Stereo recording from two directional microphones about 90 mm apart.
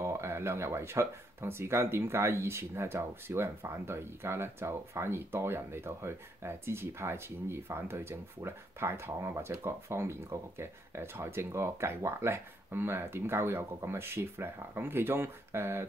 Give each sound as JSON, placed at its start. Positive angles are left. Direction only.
{"t": 0.0, "sound": "speech", "side_deg": -30}